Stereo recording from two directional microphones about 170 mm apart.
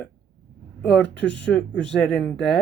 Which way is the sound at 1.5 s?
5° left (ahead or behind).